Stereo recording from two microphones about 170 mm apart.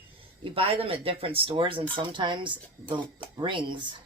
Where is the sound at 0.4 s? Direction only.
35° right (ahead or behind).